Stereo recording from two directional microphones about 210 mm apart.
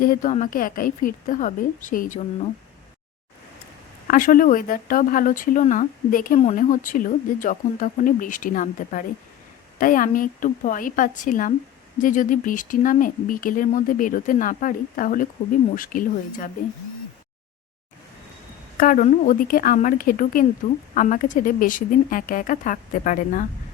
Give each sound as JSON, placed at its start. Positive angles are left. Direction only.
{"t": 0.0, "sound": "speech", "side_deg": 40}
{"t": 4.0, "sound": "speech", "side_deg": 40}
{"t": 18.8, "sound": "speech", "side_deg": 40}